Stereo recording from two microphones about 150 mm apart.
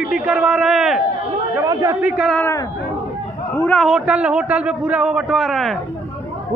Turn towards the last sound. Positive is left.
turn(degrees=0)  # may be behind; listen again after turning